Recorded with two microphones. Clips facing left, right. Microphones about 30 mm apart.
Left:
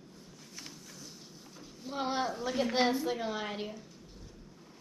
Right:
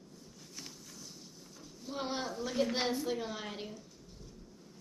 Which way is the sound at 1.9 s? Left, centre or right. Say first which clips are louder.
Left 5 dB; centre.